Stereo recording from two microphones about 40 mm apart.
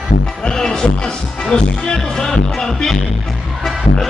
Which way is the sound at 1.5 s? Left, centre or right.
Centre.